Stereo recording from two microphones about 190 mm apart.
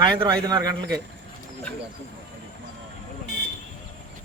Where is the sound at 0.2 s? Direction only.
20° right (ahead or behind).